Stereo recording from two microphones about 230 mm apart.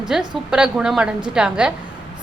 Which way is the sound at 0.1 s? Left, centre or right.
Centre.